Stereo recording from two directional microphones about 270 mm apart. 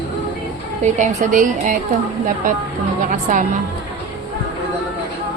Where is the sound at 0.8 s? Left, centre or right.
Right.